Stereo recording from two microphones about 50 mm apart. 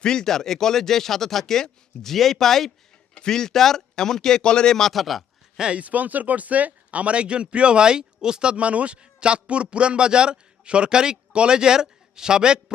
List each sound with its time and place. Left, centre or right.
0.0 s speech: centre
5.5 s speech: centre
5.8 s speech: right; by 12.7 s centre